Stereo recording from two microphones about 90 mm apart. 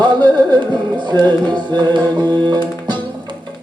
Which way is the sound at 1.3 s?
55° right (ahead or behind).